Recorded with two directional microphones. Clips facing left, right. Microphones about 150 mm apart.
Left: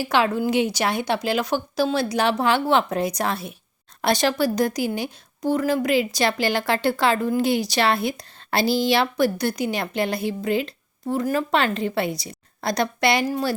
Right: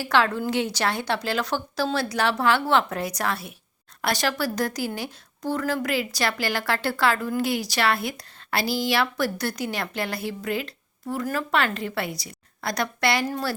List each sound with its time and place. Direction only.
0.0 s a woman's voice: 15° left (ahead or behind)